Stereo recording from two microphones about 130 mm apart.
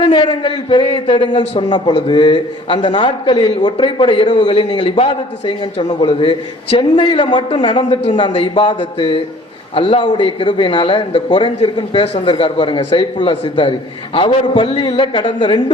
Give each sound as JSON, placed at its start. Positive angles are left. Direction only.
{"t": 0.0, "sound": "a man's voice", "side_deg": 35}
{"t": 6.0, "sound": "a man's voice", "side_deg": 35}